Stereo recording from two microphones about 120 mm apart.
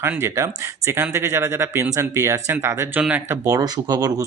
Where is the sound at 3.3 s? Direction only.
30° right (ahead or behind).